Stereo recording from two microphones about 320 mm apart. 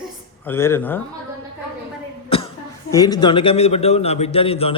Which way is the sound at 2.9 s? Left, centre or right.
Centre.